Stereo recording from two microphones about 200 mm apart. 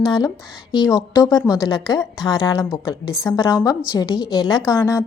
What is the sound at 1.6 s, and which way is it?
A woman's voice, 20° left (ahead or behind).